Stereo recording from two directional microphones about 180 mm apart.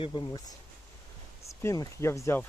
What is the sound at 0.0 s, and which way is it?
Speech, 25° left (ahead or behind).